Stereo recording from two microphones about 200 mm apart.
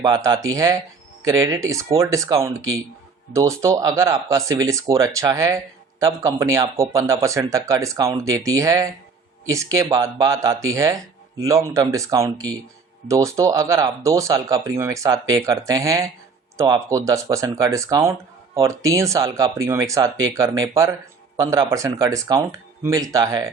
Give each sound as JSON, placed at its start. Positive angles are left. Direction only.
{"t": 0.0, "sound": "speech", "side_deg": -20}